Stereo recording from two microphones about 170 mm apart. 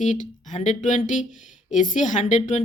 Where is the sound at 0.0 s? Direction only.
45° left (ahead or behind).